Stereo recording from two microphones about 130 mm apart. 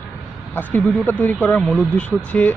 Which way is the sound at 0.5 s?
15° left (ahead or behind).